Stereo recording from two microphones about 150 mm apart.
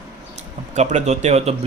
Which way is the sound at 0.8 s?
50° right (ahead or behind).